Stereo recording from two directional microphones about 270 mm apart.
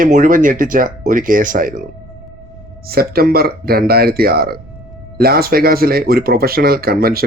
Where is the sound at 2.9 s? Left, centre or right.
Right.